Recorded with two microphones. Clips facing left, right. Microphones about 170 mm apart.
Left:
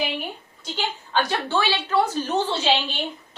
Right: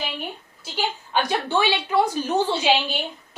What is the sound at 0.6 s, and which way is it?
A woman's voice, 10° right (ahead or behind).